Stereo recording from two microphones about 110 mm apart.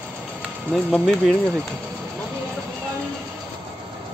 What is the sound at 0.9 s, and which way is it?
Speech, centre (ahead or behind).